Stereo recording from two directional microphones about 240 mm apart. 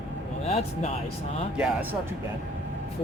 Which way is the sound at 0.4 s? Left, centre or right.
Left.